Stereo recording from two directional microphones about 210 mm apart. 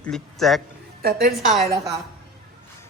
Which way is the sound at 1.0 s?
45° right (ahead or behind).